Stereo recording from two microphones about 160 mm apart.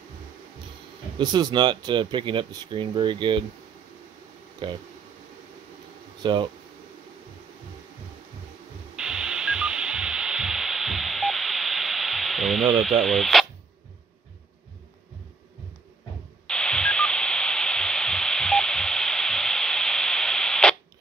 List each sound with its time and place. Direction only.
1.1 s speech: 30° right (ahead or behind)
4.6 s speech: 30° right (ahead or behind)
6.2 s speech: 30° right (ahead or behind)
8.9 s radio: 5° right (ahead or behind)
16.4 s radio: 5° left (ahead or behind)